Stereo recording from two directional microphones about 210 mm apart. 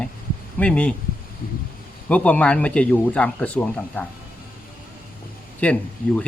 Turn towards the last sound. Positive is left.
turn(degrees=5)  # may be behind; listen again after turning